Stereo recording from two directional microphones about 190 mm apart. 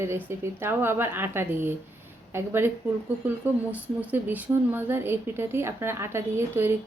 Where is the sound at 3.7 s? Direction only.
5° right (ahead or behind).